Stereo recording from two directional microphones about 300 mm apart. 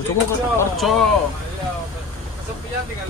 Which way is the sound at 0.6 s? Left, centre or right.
Centre.